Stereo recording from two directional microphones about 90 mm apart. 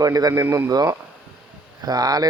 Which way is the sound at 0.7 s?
40° right (ahead or behind).